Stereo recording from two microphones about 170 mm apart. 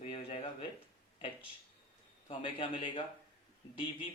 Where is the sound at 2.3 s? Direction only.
30° left (ahead or behind).